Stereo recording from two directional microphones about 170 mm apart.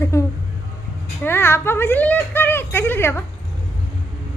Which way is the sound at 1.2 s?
15° left (ahead or behind).